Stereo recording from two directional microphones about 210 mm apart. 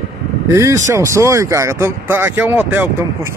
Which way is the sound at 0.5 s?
15° right (ahead or behind).